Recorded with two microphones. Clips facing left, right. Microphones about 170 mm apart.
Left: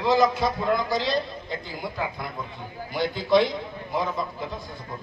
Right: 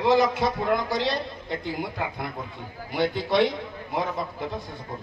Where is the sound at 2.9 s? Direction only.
65° right (ahead or behind).